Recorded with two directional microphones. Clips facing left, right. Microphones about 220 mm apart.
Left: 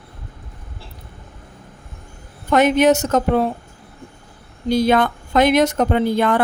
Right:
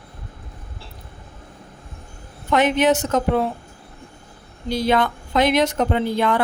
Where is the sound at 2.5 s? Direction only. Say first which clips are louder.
Left 3 dB; 45° left (ahead or behind).